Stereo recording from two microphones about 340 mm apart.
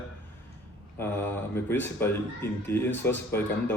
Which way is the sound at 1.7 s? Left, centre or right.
Centre.